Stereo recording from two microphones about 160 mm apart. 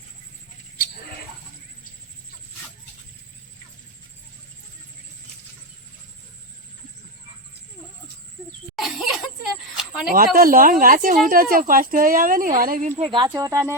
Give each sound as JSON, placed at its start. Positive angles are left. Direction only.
{"t": 8.8, "sound": "a sound", "side_deg": 0}
{"t": 10.1, "sound": "speech", "side_deg": -65}
{"t": 13.0, "sound": "speech", "side_deg": -30}
{"t": 13.3, "sound": "speech", "side_deg": -20}